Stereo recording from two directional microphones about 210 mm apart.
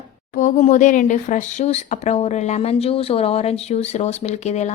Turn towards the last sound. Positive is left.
turn(degrees=30)  # may be behind; listen again after turning